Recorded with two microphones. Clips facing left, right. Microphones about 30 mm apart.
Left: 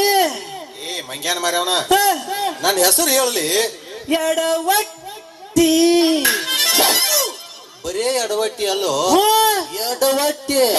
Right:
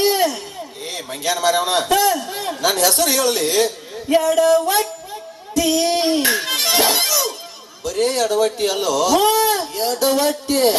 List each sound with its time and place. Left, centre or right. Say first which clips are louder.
0.2 s a sound: left 1 dB; left
0.9 s a man's voice: even; left
2.3 s a sound: left 4 dB; left
2.6 s speech: even; left
5.5 s speech: left 4 dB; left
5.9 s music: left 2 dB; left
7.9 s speech: right 1 dB; left